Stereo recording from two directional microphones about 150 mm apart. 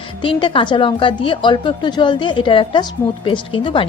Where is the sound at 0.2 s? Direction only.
35° left (ahead or behind).